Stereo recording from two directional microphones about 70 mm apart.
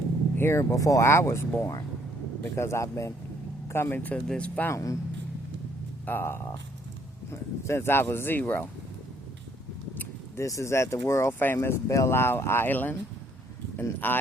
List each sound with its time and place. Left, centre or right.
0.3 s vehicle: left
0.6 s speech: left
3.7 s speech: left
4.3 s speech: centre
4.7 s speech: left
6.1 s speech: left
10.3 s speech: left
14.0 s speech: left